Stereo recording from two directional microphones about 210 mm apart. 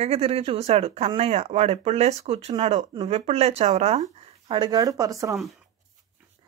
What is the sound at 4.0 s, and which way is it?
Speech, 20° right (ahead or behind).